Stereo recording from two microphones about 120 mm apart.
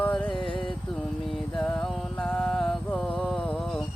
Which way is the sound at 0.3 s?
45° left (ahead or behind).